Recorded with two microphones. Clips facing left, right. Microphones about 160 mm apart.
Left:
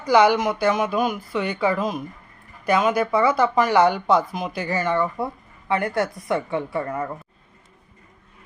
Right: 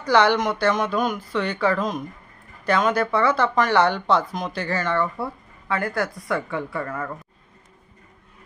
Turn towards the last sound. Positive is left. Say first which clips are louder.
# left 3 dB
turn(degrees=20)  # may be behind; listen again after turning